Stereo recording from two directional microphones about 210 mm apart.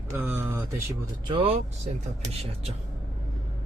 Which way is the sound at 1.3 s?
25° right (ahead or behind).